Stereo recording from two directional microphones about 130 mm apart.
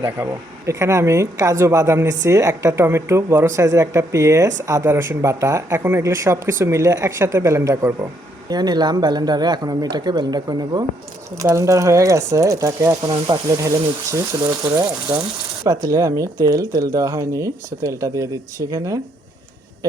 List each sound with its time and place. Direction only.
0.0 s speech: 20° right (ahead or behind)
15.1 s speech: 15° right (ahead or behind)
15.6 s speech: 25° right (ahead or behind)